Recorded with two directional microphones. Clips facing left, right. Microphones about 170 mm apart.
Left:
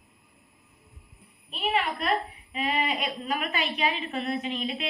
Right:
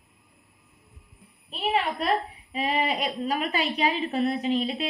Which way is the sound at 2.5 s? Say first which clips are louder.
Right 2 dB; 35° right (ahead or behind).